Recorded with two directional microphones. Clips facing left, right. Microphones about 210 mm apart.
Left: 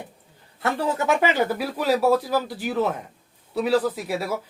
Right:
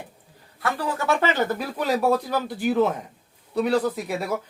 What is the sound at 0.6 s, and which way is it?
Speech, 25° left (ahead or behind).